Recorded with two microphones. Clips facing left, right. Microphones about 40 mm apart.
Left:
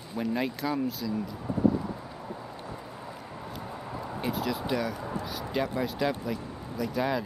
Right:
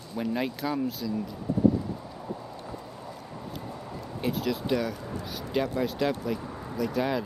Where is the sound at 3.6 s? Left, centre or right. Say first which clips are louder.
Left 2 dB; centre.